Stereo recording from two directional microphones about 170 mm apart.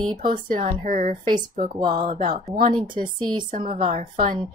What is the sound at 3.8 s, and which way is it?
Speech, 45° right (ahead or behind).